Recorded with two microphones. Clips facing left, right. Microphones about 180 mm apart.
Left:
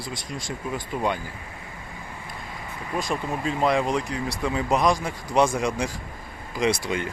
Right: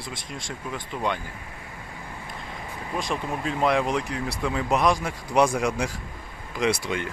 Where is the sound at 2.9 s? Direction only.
Centre (ahead or behind).